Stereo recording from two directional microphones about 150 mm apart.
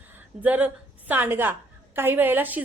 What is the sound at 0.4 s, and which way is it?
A woman's voice, 10° right (ahead or behind).